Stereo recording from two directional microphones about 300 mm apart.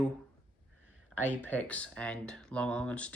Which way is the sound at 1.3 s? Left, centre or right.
Centre.